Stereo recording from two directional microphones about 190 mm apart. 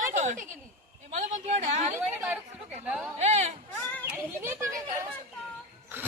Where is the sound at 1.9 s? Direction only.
15° right (ahead or behind).